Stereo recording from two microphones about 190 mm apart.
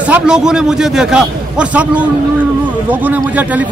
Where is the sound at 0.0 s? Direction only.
5° right (ahead or behind).